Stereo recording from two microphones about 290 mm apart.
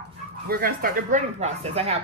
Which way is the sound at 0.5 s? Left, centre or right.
Right.